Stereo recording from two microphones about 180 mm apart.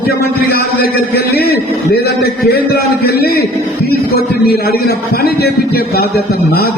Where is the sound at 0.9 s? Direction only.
60° left (ahead or behind).